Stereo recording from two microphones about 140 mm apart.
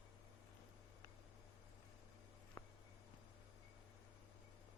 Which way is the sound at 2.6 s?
20° left (ahead or behind).